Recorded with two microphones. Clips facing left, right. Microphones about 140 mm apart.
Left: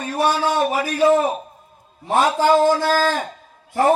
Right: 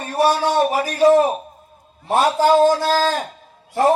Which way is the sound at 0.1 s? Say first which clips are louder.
Right 2 dB; 35° right (ahead or behind).